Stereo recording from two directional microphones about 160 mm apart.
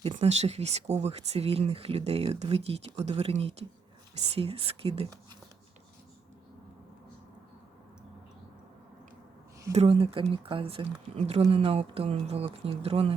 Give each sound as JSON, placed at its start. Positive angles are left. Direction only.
{"t": 0.1, "sound": "speech", "side_deg": -40}
{"t": 9.7, "sound": "speech", "side_deg": -40}